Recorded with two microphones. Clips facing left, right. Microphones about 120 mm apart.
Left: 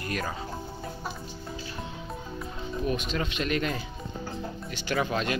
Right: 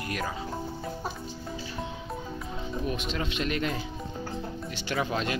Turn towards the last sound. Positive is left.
turn(degrees=-20)  # may be behind; listen again after turning